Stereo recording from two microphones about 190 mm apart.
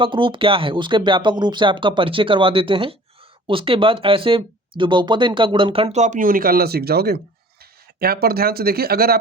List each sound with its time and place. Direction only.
0.0 s speech: 25° right (ahead or behind); by 9.1 s 55° right (ahead or behind)